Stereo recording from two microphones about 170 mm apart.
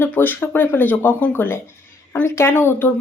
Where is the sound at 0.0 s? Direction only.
10° left (ahead or behind).